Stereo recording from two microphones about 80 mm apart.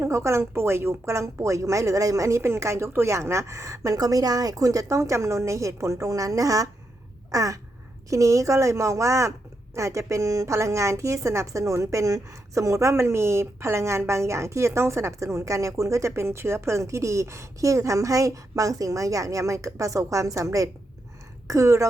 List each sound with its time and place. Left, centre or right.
0.0 s a woman's voice: right
7.3 s a sound: right
8.1 s a woman's voice: right